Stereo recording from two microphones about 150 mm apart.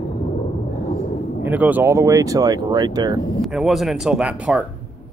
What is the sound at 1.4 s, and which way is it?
Speech, 10° right (ahead or behind).